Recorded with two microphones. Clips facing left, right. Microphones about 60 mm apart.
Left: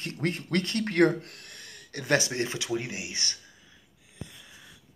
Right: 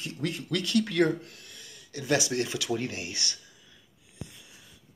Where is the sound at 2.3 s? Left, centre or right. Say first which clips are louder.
Right 1 dB; left.